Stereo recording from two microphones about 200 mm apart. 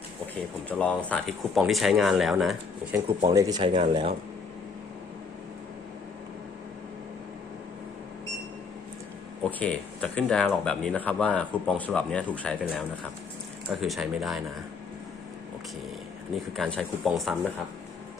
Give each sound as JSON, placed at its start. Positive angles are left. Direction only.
{"t": 0.7, "sound": "speech", "side_deg": 5}
{"t": 3.2, "sound": "speech", "side_deg": -20}
{"t": 9.4, "sound": "speech", "side_deg": 5}
{"t": 13.7, "sound": "speech", "side_deg": 0}
{"t": 16.3, "sound": "speech", "side_deg": 5}